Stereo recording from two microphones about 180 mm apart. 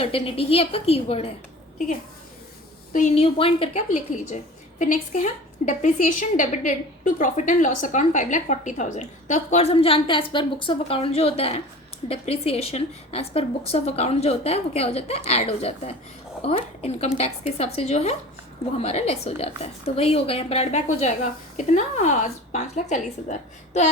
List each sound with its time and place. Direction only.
0.0 s a woman's voice: 30° left (ahead or behind)
2.9 s a woman's voice: 45° left (ahead or behind)
3.3 s a woman's voice: 30° left (ahead or behind)
3.8 s a woman's voice: 40° left (ahead or behind)